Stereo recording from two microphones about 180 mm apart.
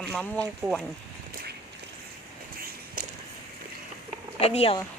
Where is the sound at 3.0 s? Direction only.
50° right (ahead or behind).